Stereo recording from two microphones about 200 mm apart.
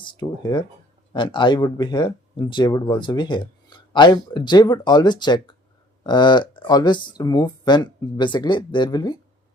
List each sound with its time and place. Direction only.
0.0 s speech: 20° left (ahead or behind)